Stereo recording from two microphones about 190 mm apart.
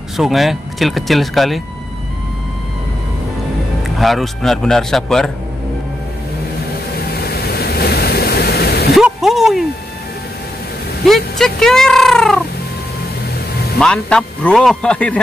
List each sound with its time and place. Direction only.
0.2 s speech: centre (ahead or behind)
4.0 s speech: centre (ahead or behind)
7.2 s a sound: 55° left (ahead or behind)
8.9 s a sound: centre (ahead or behind)
11.1 s speech: centre (ahead or behind)
13.7 s speech: 5° left (ahead or behind)